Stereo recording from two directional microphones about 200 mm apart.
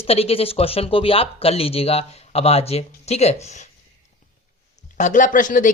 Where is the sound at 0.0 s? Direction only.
30° left (ahead or behind).